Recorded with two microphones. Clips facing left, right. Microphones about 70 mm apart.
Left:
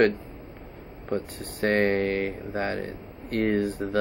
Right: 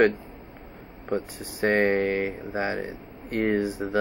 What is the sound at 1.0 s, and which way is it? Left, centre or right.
Speech, centre.